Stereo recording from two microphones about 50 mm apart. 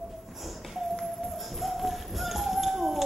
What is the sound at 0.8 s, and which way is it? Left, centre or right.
Tap, centre.